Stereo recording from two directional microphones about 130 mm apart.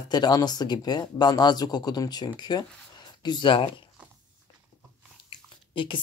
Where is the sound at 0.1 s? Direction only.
30° left (ahead or behind).